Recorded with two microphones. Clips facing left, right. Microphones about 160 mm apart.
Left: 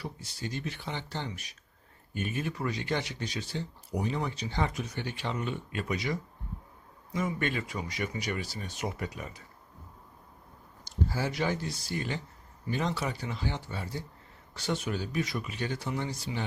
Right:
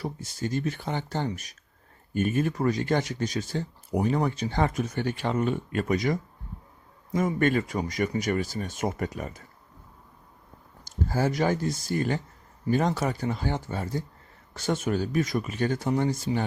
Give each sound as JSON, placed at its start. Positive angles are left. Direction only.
{"t": 0.0, "sound": "speech", "side_deg": -45}
{"t": 10.8, "sound": "speech", "side_deg": -45}